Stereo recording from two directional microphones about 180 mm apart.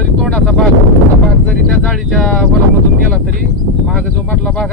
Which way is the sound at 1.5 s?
5° left (ahead or behind).